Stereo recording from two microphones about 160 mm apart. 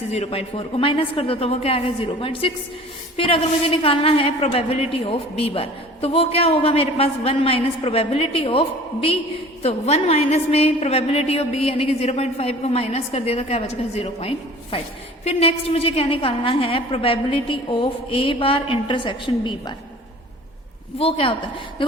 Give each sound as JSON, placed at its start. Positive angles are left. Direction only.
{"t": 0.1, "sound": "a woman's voice", "side_deg": 40}
{"t": 21.0, "sound": "a woman's voice", "side_deg": 35}